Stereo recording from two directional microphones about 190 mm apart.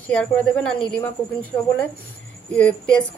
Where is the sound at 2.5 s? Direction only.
5° left (ahead or behind).